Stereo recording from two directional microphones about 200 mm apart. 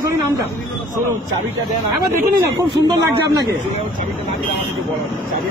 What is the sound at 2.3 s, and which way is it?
A man's voice, 15° right (ahead or behind).